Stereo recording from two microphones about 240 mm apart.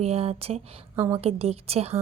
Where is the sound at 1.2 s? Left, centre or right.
Right.